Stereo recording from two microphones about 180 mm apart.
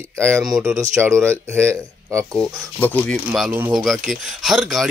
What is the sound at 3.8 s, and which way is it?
Speech, centre (ahead or behind).